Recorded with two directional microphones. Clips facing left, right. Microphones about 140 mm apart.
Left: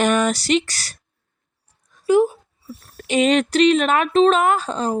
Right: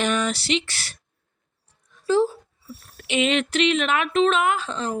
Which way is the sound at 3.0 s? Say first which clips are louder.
Left 5 dB; 40° left (ahead or behind).